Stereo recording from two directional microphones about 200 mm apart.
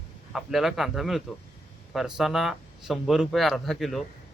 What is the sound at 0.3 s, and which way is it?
A man's voice, centre (ahead or behind).